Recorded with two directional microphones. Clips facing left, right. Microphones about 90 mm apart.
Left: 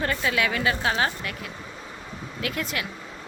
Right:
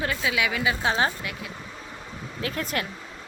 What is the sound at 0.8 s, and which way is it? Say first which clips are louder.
Speech: right 2 dB; 25° right (ahead or behind).